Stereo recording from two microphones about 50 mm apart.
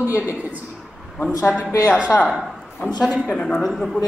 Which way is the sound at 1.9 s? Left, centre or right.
Right.